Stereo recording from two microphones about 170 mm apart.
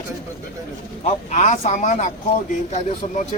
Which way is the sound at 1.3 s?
45° left (ahead or behind).